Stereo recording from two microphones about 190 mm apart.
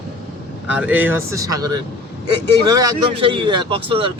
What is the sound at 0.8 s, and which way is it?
A man's voice, 10° right (ahead or behind).